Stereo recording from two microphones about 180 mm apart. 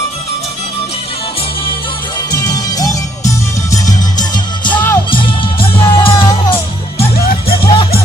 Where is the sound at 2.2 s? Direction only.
20° left (ahead or behind).